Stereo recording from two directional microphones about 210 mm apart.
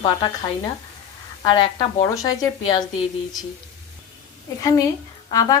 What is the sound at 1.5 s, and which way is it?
Speech, 20° left (ahead or behind).